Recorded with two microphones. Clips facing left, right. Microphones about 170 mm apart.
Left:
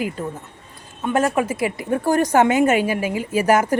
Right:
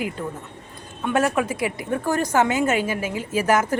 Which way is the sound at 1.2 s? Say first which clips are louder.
Left 2 dB; 5° left (ahead or behind).